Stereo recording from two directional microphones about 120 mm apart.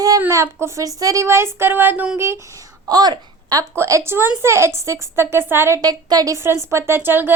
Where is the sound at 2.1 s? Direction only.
20° right (ahead or behind).